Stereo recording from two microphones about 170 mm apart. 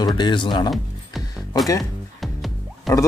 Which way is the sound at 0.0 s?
25° left (ahead or behind).